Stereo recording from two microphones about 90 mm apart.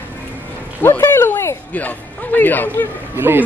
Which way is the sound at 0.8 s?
25° left (ahead or behind).